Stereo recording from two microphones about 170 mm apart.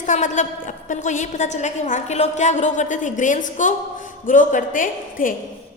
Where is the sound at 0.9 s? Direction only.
45° left (ahead or behind).